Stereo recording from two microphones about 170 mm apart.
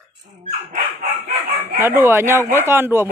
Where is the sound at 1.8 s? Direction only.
10° right (ahead or behind).